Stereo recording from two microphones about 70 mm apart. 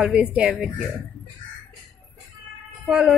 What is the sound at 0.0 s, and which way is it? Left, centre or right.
Speech, centre.